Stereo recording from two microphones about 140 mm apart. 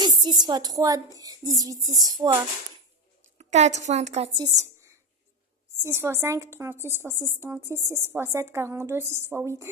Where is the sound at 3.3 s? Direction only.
55° right (ahead or behind).